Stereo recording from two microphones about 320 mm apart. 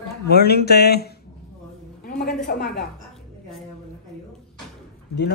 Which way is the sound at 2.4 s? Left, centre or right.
Left.